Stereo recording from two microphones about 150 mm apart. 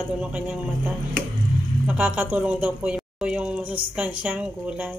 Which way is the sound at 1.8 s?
10° right (ahead or behind).